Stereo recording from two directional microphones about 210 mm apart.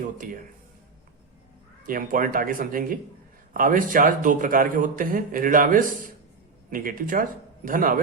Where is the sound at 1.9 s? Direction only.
40° right (ahead or behind).